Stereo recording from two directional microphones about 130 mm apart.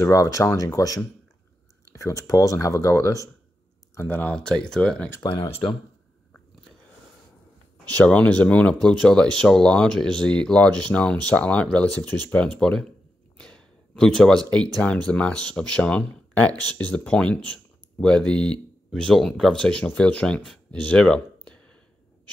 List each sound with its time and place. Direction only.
0.0 s speech: 25° left (ahead or behind); by 5.1 s 5° left (ahead or behind)
5.2 s speech: 35° left (ahead or behind)
7.9 s speech: 10° left (ahead or behind)